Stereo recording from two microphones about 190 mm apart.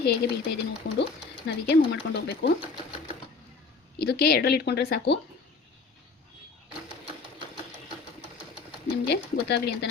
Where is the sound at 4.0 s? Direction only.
55° left (ahead or behind).